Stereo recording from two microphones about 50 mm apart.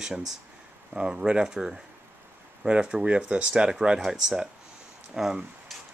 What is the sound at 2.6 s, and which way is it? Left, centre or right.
Speech, right.